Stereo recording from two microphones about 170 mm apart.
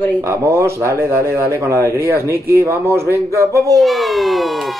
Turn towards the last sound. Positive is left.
turn(degrees=0)  # may be behind; listen again after turning